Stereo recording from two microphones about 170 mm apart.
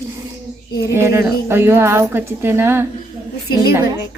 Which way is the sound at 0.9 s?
15° right (ahead or behind).